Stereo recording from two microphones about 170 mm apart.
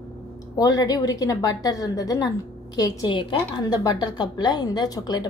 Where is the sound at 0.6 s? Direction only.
20° left (ahead or behind).